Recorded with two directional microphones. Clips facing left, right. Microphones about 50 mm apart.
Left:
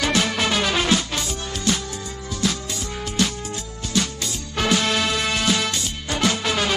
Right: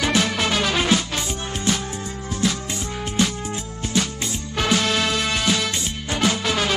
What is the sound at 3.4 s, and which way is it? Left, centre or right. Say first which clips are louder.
Music: right 2 dB; right.